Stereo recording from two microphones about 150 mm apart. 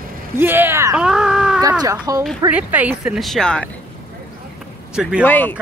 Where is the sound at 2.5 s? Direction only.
10° right (ahead or behind).